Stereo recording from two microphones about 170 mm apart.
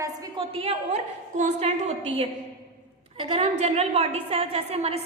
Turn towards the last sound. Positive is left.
turn(degrees=-35)  # may be behind; listen again after turning